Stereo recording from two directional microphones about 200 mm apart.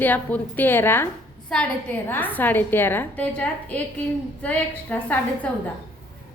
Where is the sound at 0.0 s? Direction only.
10° left (ahead or behind).